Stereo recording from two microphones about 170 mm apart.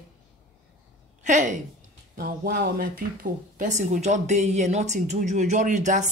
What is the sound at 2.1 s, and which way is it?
Speech, 60° right (ahead or behind).